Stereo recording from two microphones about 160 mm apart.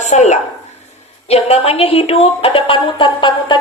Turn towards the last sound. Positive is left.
turn(degrees=30)  # may be behind; listen again after turning